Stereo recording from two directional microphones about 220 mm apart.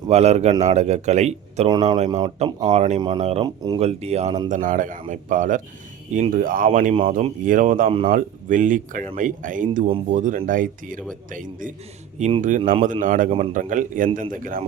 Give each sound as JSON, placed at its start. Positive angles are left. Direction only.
{"t": 0.1, "sound": "speech", "side_deg": -30}
{"t": 8.1, "sound": "speech", "side_deg": -35}